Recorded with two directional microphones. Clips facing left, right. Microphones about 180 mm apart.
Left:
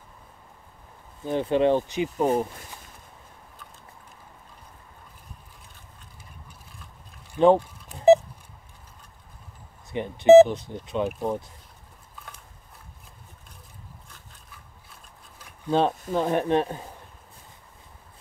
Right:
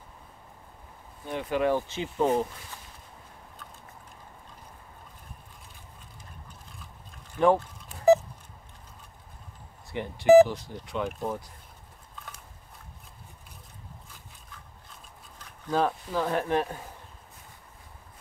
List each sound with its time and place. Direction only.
1.2 s speech: 30° left (ahead or behind)
2.0 s speech: 30° left (ahead or behind)
7.3 s a sound: 20° left (ahead or behind)
9.8 s speech: 20° left (ahead or behind)
14.5 s a sound: 10° left (ahead or behind)
15.7 s speech: 25° left (ahead or behind)